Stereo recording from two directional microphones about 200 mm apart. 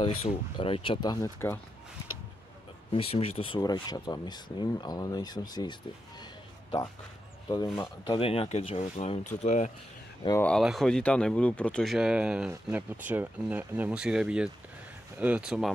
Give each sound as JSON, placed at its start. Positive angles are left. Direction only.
{"t": 0.0, "sound": "speech", "side_deg": 30}
{"t": 1.1, "sound": "speech", "side_deg": 15}
{"t": 2.9, "sound": "speech", "side_deg": 30}
{"t": 8.1, "sound": "speech", "side_deg": 30}
{"t": 10.4, "sound": "speech", "side_deg": 0}